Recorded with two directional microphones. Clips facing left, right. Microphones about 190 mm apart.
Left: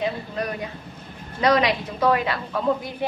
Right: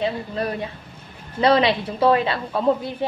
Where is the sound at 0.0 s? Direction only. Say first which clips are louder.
Right 2 dB; 30° right (ahead or behind).